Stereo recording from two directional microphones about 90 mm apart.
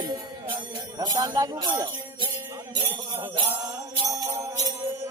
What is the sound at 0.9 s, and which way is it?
Speech, 45° right (ahead or behind).